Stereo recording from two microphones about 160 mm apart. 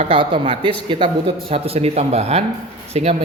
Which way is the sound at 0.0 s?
35° right (ahead or behind).